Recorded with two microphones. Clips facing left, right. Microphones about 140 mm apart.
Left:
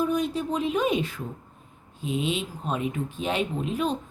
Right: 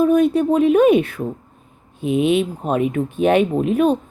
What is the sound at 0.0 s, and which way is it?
Speech, 60° right (ahead or behind).